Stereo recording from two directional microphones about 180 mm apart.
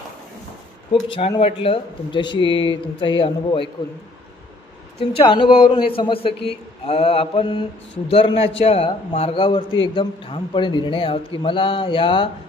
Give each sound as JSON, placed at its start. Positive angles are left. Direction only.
{"t": 1.0, "sound": "a man's voice", "side_deg": 30}
{"t": 5.1, "sound": "a man's voice", "side_deg": 30}